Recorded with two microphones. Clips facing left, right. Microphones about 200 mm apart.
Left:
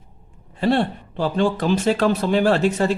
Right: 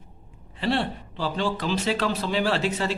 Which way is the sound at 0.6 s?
50° left (ahead or behind).